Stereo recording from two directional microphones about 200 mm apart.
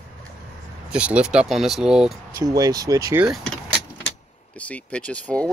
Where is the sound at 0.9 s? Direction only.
5° right (ahead or behind).